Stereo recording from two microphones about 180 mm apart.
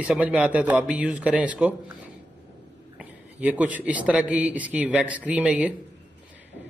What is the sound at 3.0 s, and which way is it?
Speech, 5° right (ahead or behind).